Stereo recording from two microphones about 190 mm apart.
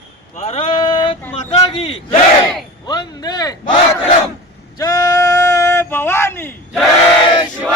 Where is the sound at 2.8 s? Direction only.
20° left (ahead or behind).